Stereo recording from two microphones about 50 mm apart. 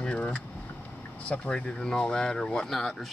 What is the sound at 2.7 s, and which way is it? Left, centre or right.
Speech, centre.